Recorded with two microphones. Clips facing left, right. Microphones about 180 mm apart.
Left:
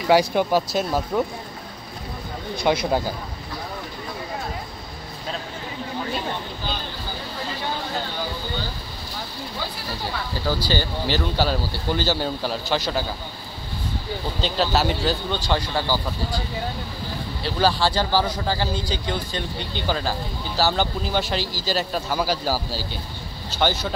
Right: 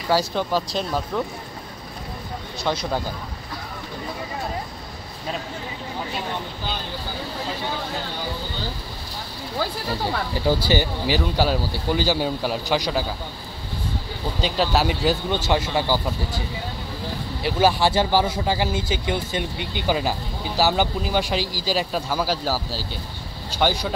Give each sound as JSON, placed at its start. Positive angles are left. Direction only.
{"t": 0.1, "sound": "speech", "side_deg": 15}
{"t": 2.5, "sound": "speech", "side_deg": 10}
{"t": 10.4, "sound": "speech", "side_deg": -15}
{"t": 14.4, "sound": "speech", "side_deg": -5}
{"t": 17.4, "sound": "speech", "side_deg": -15}
{"t": 23.6, "sound": "speech", "side_deg": -10}